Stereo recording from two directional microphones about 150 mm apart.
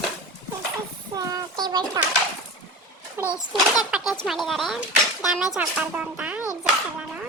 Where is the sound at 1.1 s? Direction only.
25° right (ahead or behind).